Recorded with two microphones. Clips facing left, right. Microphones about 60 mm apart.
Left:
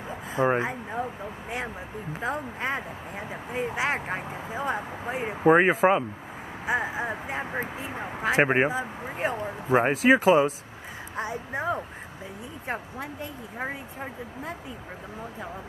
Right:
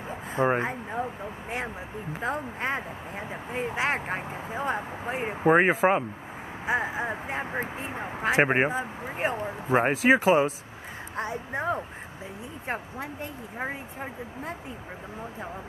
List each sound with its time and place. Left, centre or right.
0.1 s a sound: centre
2.1 s speech: centre
8.2 s speech: centre
8.5 s speech: centre
11.1 s speech: centre